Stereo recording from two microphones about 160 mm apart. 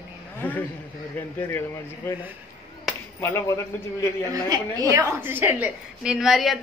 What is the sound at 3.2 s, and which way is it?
Speech, 15° left (ahead or behind).